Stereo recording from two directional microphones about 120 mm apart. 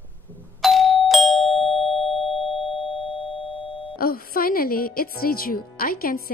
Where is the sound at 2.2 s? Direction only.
45° left (ahead or behind).